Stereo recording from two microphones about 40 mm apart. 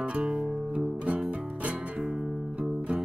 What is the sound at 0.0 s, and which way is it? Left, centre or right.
Music, right.